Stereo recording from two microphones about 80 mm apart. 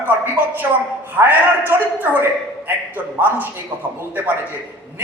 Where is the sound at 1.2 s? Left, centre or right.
Right.